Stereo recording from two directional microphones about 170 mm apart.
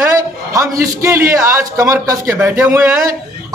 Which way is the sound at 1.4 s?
15° right (ahead or behind).